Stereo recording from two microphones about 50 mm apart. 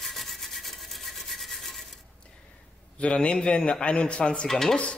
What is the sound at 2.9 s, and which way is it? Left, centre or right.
A man's voice, left.